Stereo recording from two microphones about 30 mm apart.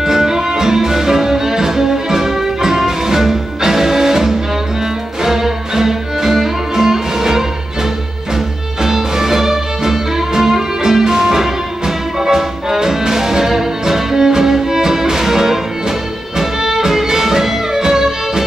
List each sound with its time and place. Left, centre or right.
0.0 s music: centre
8.8 s music: centre